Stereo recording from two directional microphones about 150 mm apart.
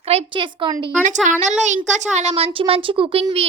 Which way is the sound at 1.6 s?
55° right (ahead or behind).